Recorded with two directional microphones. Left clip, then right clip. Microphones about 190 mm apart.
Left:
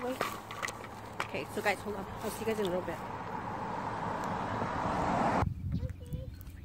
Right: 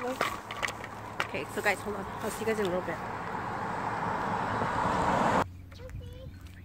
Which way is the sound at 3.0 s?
30° right (ahead or behind).